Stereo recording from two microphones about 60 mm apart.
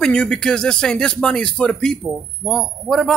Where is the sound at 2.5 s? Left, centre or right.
Centre.